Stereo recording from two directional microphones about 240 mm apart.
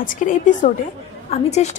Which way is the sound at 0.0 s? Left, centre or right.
Left.